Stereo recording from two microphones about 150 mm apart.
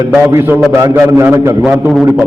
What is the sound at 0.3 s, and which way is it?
A man's voice, 15° right (ahead or behind).